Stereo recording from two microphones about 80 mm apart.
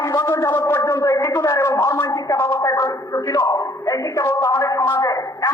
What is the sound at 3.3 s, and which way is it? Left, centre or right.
A man's voice, left.